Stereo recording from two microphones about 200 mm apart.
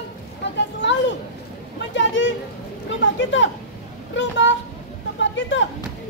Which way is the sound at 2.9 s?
70° left (ahead or behind).